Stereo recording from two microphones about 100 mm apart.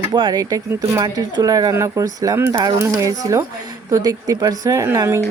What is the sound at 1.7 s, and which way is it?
Speech, 30° right (ahead or behind).